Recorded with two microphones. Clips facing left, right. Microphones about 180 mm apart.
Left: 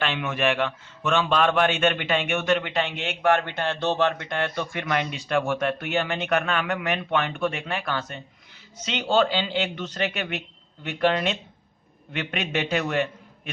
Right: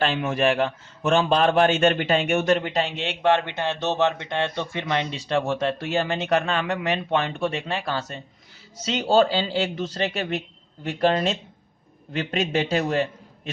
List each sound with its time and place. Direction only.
0.0 s a man's voice: 35° right (ahead or behind)